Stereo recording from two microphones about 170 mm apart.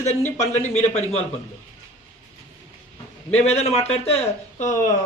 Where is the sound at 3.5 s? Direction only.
35° left (ahead or behind).